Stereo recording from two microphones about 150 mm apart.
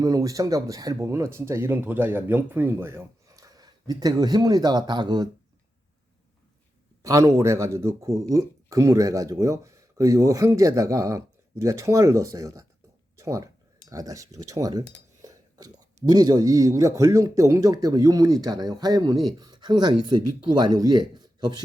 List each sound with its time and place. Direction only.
0.0 s speech: 25° right (ahead or behind)
7.0 s speech: 20° right (ahead or behind)
14.3 s cutlery: 20° right (ahead or behind)
16.0 s speech: 25° right (ahead or behind)